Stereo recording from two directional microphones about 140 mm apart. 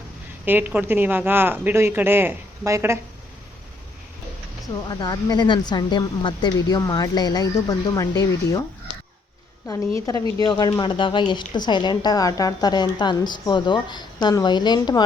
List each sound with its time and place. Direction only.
0.4 s speech: 15° right (ahead or behind)
4.9 s speech: 30° left (ahead or behind)
9.6 s speech: 25° left (ahead or behind)